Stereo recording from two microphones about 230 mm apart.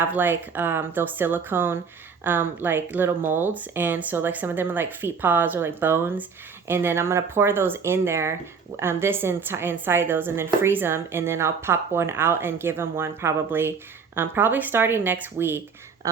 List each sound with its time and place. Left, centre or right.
0.0 s speech: centre